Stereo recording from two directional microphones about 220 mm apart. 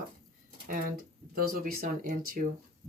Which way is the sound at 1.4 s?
40° right (ahead or behind).